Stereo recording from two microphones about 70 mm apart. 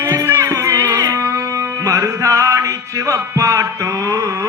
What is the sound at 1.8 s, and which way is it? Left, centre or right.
Music, right.